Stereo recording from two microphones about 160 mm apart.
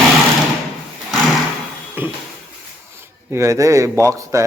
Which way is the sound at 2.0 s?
10° right (ahead or behind).